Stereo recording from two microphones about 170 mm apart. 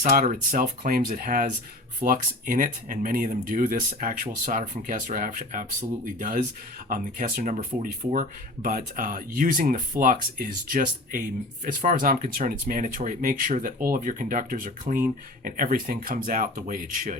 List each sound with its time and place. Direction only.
0.0 s speech: 50° right (ahead or behind)